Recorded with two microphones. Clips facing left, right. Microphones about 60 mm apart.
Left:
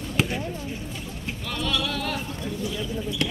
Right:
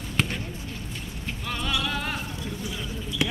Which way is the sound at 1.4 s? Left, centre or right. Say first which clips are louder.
Left 1 dB; centre.